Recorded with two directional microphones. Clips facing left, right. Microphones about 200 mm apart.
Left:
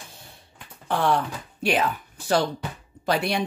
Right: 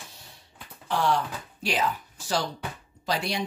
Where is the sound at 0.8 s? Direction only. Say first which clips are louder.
Left 3 dB; 55° left (ahead or behind).